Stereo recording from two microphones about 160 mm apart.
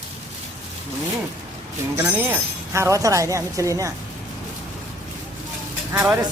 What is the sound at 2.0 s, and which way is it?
Speech, 10° right (ahead or behind).